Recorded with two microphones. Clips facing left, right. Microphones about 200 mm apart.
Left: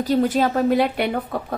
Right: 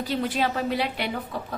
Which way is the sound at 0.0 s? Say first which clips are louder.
Left 7 dB; 45° left (ahead or behind).